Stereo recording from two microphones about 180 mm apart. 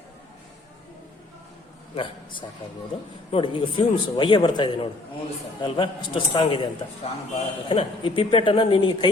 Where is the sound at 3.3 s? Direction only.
30° left (ahead or behind).